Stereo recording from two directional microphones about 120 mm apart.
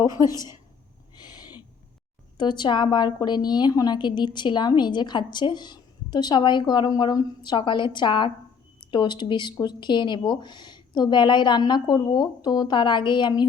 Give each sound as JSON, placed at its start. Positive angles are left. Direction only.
{"t": 0.3, "sound": "a woman's voice", "side_deg": 35}
{"t": 2.4, "sound": "a woman's voice", "side_deg": 40}